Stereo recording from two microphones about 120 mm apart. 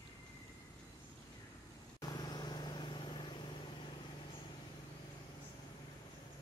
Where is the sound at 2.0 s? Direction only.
35° left (ahead or behind).